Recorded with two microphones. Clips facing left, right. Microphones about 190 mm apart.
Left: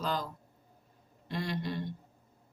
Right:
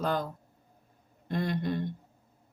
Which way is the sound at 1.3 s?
50° right (ahead or behind).